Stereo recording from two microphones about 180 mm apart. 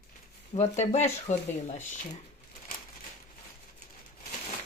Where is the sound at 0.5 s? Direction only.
25° left (ahead or behind).